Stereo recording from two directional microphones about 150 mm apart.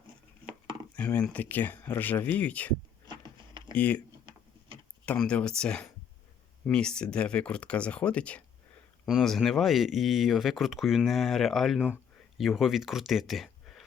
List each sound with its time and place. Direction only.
0.9 s speech: 10° left (ahead or behind)
3.1 s a sound: 30° right (ahead or behind)
3.8 s speech: 10° left (ahead or behind)
5.0 s speech: 5° left (ahead or behind)